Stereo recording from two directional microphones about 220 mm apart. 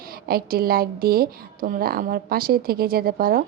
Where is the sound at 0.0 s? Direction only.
45° right (ahead or behind).